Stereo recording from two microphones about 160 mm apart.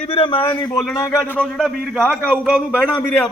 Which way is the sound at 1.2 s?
5° left (ahead or behind).